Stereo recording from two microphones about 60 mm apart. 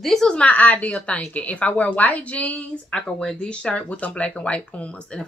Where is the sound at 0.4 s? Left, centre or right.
Left.